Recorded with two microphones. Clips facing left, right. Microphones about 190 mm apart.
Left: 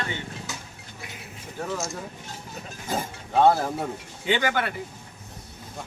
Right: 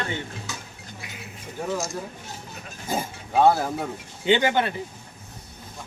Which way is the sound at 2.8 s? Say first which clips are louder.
Right 1 dB; 10° right (ahead or behind).